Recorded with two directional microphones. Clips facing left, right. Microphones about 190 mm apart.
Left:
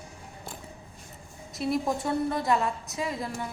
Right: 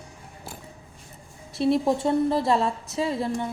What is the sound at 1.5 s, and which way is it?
A woman's voice, 30° right (ahead or behind).